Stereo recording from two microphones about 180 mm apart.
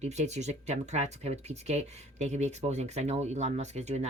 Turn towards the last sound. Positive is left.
turn(degrees=-40)  # may be behind; listen again after turning